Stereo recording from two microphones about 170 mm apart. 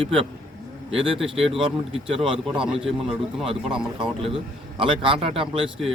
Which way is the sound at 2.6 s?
Centre (ahead or behind).